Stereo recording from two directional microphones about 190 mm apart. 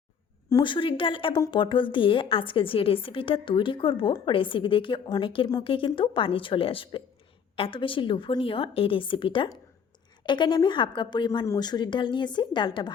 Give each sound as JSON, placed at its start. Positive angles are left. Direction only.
{"t": 0.5, "sound": "a woman's voice", "side_deg": 25}